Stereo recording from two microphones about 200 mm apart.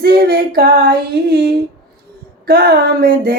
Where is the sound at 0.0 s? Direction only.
50° right (ahead or behind).